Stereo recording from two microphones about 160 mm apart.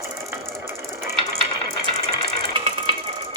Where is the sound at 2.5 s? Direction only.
35° right (ahead or behind).